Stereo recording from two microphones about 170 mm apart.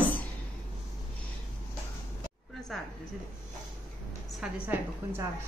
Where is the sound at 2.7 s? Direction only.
Centre (ahead or behind).